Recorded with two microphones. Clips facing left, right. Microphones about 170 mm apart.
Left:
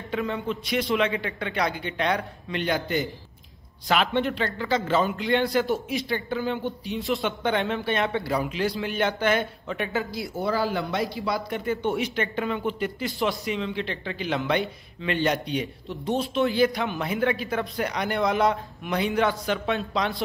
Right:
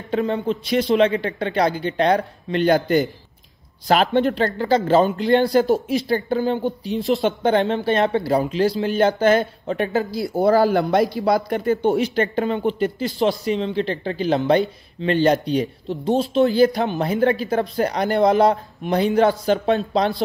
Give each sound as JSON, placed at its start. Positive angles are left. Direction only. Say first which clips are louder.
{"t": 0.1, "sound": "speech", "louder": "right 7 dB", "side_deg": -35}